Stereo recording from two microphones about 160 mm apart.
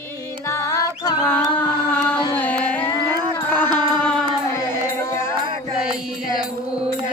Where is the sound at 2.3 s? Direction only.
10° left (ahead or behind).